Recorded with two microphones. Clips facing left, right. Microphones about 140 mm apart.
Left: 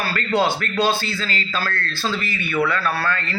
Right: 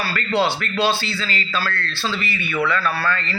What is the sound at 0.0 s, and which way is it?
A man's voice, 45° left (ahead or behind).